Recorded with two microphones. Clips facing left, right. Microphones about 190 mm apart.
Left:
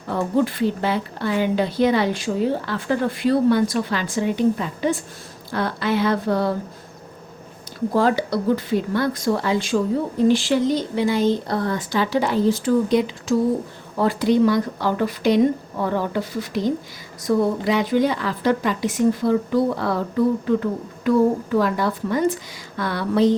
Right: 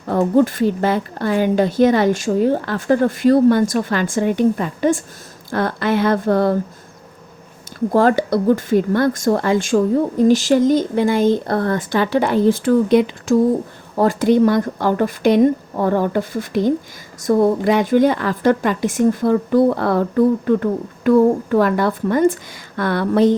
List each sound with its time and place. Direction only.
0.1 s a woman's voice: 45° right (ahead or behind)
7.9 s a woman's voice: 50° right (ahead or behind)
13.9 s a woman's voice: 45° right (ahead or behind)